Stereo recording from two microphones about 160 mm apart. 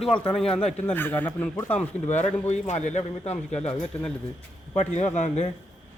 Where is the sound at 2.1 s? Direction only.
45° left (ahead or behind).